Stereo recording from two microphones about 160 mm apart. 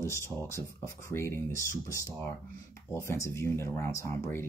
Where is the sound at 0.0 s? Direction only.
15° left (ahead or behind).